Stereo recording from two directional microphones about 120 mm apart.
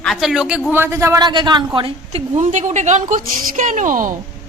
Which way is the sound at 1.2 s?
40° right (ahead or behind).